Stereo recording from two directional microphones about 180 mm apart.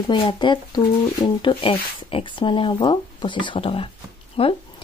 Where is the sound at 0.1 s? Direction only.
25° left (ahead or behind).